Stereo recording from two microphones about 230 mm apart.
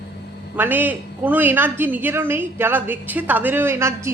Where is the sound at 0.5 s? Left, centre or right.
Centre.